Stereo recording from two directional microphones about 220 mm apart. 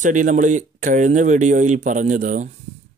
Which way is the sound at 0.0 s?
35° right (ahead or behind).